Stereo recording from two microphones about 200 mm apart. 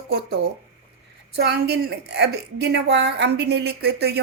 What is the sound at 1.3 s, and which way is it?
A woman's voice, 55° right (ahead or behind).